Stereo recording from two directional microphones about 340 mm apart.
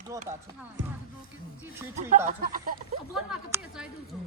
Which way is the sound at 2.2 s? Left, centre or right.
Right.